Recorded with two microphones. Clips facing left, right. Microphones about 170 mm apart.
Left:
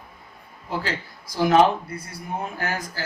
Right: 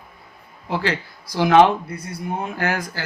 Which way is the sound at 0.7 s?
75° right (ahead or behind).